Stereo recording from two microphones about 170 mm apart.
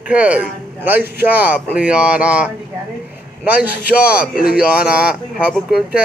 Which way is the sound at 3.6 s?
65° left (ahead or behind).